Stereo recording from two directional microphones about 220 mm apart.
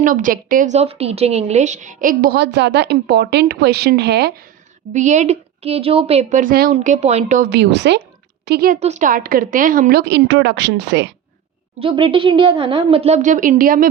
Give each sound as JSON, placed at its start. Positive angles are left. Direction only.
{"t": 0.0, "sound": "a woman's voice", "side_deg": -40}
{"t": 4.9, "sound": "a woman's voice", "side_deg": -30}
{"t": 8.8, "sound": "a woman's voice", "side_deg": -35}
{"t": 11.8, "sound": "a woman's voice", "side_deg": -25}